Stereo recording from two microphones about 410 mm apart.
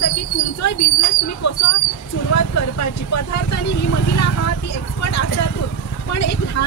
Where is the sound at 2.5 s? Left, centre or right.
Left.